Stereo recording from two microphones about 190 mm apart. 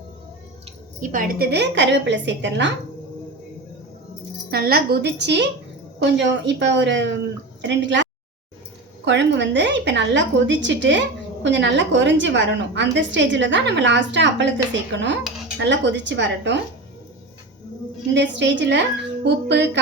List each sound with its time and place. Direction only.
1.0 s a woman's voice: 45° right (ahead or behind); by 2.6 s 70° right (ahead or behind)
4.5 s a woman's voice: 55° right (ahead or behind); by 8.0 s 70° right (ahead or behind)
9.0 s a woman's voice: 65° right (ahead or behind)
18.1 s a woman's voice: 70° right (ahead or behind)